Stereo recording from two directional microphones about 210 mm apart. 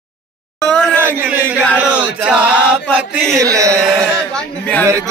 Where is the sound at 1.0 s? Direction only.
10° right (ahead or behind).